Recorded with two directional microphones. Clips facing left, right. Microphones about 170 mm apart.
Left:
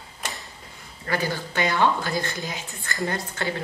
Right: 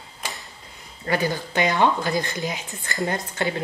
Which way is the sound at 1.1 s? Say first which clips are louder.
Right 3 dB; 20° right (ahead or behind).